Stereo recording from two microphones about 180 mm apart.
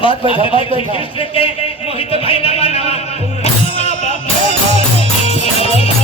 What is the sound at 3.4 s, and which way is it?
Music, 35° left (ahead or behind).